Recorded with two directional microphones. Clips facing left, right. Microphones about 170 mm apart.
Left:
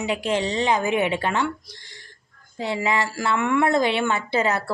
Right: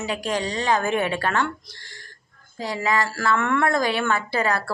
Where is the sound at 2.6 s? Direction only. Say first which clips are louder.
Even; 20° left (ahead or behind).